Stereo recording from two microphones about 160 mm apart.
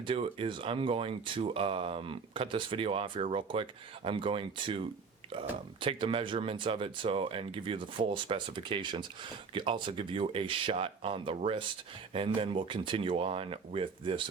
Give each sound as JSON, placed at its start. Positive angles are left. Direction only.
{"t": 0.0, "sound": "speech", "side_deg": -35}